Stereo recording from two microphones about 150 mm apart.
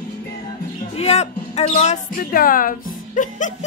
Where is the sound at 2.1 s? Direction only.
70° left (ahead or behind).